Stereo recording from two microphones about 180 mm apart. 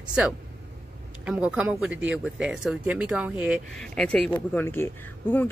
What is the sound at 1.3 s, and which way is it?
Speech, 5° right (ahead or behind).